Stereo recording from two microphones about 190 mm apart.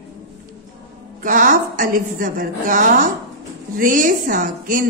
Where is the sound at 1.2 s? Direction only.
45° right (ahead or behind).